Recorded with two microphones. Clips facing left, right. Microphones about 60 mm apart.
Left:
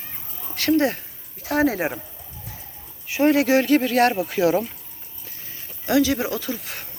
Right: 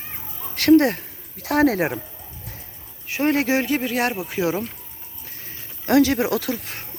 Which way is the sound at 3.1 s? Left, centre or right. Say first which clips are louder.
Left 3 dB; right.